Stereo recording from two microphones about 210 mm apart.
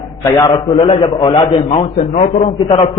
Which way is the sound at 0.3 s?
20° left (ahead or behind).